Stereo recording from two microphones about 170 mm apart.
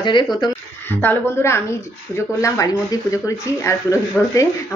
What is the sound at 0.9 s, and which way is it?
Speech, 10° left (ahead or behind).